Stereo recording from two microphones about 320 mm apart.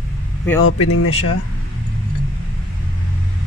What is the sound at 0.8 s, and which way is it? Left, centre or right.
Speech, left.